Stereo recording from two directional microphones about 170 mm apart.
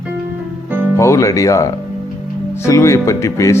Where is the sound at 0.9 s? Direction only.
15° left (ahead or behind).